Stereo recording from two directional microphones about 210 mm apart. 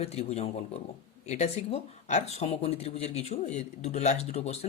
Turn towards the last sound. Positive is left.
turn(degrees=30)  # may be behind; listen again after turning